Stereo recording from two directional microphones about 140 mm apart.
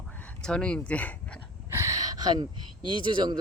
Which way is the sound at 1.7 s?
25° right (ahead or behind).